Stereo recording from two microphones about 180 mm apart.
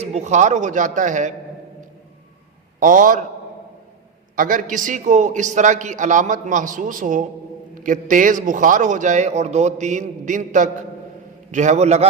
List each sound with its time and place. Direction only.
0.0 s speech: 35° right (ahead or behind)
2.8 s a man's voice: 50° right (ahead or behind)
4.4 s a man's voice: 50° right (ahead or behind)